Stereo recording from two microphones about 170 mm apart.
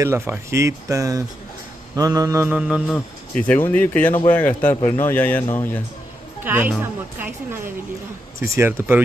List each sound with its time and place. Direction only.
0.0 s speech: 15° right (ahead or behind)
2.0 s mantra: 20° right (ahead or behind)
2.7 s speech: 5° left (ahead or behind)
6.4 s speech: 10° right (ahead or behind)